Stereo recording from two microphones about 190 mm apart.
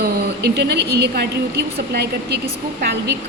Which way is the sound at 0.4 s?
60° right (ahead or behind).